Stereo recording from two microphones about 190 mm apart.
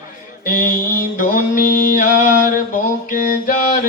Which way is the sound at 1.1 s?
45° left (ahead or behind).